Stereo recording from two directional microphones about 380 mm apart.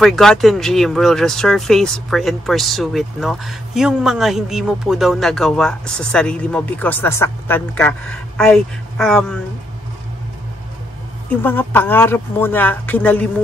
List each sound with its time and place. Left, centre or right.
0.0 s speech: centre
11.2 s speech: centre